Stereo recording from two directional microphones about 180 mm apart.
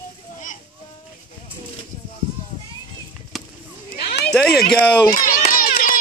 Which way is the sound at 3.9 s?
60° left (ahead or behind).